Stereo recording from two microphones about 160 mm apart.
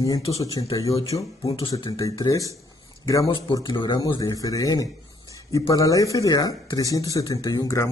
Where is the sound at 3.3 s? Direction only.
30° left (ahead or behind).